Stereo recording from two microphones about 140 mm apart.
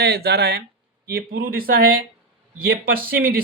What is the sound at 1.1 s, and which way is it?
Speech, 90° right.